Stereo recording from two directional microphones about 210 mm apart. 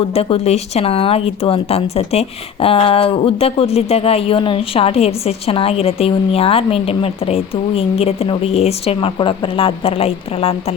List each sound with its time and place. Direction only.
0.1 s speech: 30° left (ahead or behind)